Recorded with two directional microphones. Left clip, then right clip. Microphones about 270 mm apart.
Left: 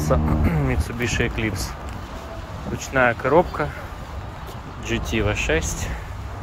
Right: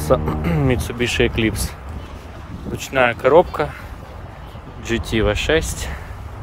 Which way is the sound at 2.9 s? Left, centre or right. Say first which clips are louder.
Right 4 dB; right.